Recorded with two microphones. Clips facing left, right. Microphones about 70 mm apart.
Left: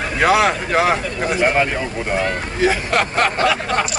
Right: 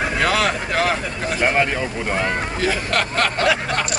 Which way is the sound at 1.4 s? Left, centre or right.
Centre.